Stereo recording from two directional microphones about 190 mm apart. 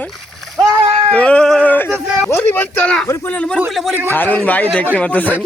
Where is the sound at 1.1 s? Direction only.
5° left (ahead or behind).